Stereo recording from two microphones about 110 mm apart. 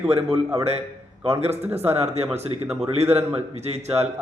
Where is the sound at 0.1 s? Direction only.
65° right (ahead or behind).